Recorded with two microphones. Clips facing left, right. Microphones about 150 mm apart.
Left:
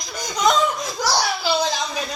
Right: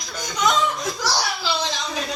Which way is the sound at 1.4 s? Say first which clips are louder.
Left 4 dB; 45° left (ahead or behind).